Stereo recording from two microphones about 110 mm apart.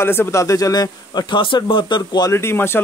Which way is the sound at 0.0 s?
20° left (ahead or behind).